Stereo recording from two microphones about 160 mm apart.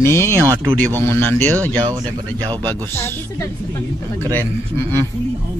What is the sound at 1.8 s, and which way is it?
Speech, 25° right (ahead or behind).